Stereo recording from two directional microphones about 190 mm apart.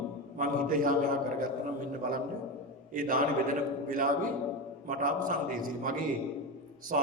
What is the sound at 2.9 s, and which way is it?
A man's voice, 45° right (ahead or behind).